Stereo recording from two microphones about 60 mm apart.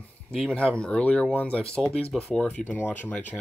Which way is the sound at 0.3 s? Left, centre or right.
Centre.